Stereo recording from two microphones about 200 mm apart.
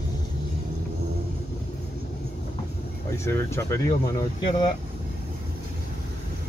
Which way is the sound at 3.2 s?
15° left (ahead or behind).